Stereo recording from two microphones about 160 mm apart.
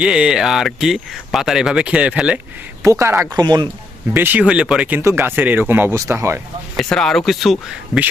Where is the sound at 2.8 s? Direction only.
20° right (ahead or behind).